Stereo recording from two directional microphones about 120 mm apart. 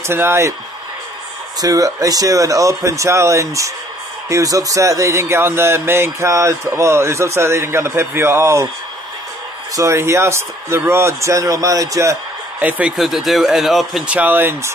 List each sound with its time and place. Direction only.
0.0 s speech: 20° right (ahead or behind)
1.6 s speech: 30° right (ahead or behind)
9.8 s speech: 25° right (ahead or behind)
12.5 s a man's voice: 15° right (ahead or behind)
12.9 s speech: centre (ahead or behind)
14.0 s speech: 15° right (ahead or behind)